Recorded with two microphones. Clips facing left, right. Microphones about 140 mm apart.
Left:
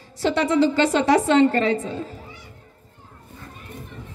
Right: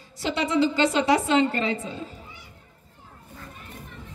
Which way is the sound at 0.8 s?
45° left (ahead or behind).